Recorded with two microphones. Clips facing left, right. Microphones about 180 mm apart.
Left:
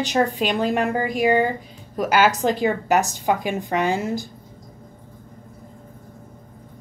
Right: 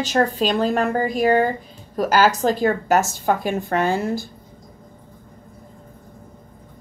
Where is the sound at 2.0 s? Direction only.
35° right (ahead or behind).